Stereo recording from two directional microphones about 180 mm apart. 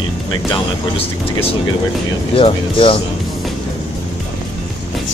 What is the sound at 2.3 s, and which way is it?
Speech, 30° left (ahead or behind).